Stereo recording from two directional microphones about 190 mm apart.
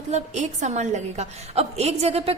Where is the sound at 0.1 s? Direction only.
40° right (ahead or behind).